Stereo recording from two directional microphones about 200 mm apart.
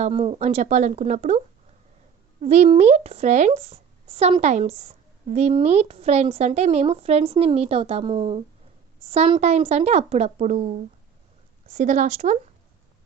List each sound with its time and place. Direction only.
0.0 s speech: 30° right (ahead or behind)
2.4 s speech: 35° right (ahead or behind)